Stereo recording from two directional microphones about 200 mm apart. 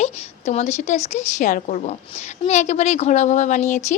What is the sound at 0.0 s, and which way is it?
Speech, 35° left (ahead or behind).